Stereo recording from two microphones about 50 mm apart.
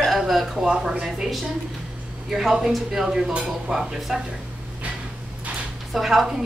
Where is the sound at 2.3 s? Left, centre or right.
Centre.